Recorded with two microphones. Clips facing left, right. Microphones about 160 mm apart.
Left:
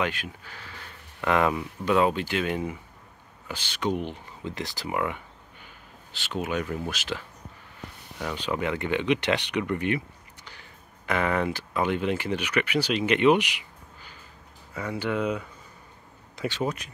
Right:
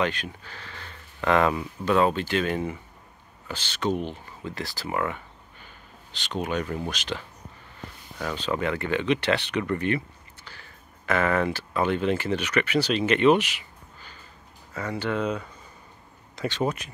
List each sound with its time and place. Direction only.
0.0 s speech: 10° left (ahead or behind)
8.2 s speech: 10° left (ahead or behind)